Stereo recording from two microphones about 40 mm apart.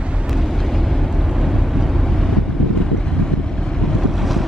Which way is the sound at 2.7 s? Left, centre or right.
Centre.